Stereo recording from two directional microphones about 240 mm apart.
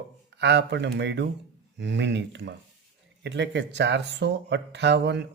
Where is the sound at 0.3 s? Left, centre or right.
Right.